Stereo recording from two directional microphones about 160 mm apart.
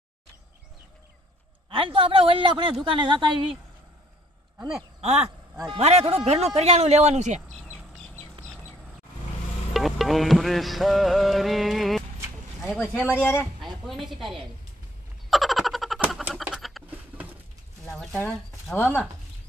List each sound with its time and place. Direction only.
1.7 s speech: 35° right (ahead or behind)
5.0 s speech: 45° right (ahead or behind)
7.6 s squawk: 5° right (ahead or behind)
9.8 s music: centre (ahead or behind)
12.5 s a sound: 5° right (ahead or behind)
12.8 s speech: 10° left (ahead or behind)
13.8 s a woman's voice: centre (ahead or behind)
15.2 s frog: centre (ahead or behind)
16.3 s bird: 5° right (ahead or behind)
17.8 s a sound: centre (ahead or behind)
18.8 s speech: 10° left (ahead or behind)